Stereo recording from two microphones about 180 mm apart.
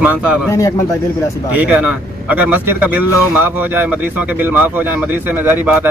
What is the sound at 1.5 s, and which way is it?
Speech, 5° right (ahead or behind).